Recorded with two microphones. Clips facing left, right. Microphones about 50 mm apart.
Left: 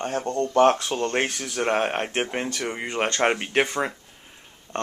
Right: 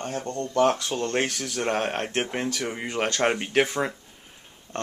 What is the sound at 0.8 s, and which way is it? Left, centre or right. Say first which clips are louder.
Speech: left 1 dB; centre.